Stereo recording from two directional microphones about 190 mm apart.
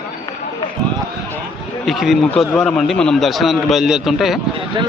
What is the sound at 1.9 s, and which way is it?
A man's voice, centre (ahead or behind).